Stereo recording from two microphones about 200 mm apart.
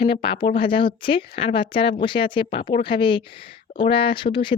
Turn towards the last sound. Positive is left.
turn(degrees=25)  # may be behind; listen again after turning